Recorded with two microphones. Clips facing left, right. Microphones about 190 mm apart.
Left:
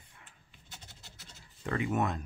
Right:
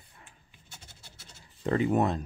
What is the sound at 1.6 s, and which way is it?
Speech, 35° right (ahead or behind).